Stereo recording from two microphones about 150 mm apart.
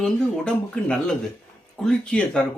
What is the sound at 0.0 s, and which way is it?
Speech, 5° left (ahead or behind).